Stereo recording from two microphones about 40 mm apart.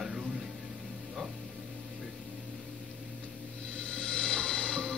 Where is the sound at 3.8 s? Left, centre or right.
Left.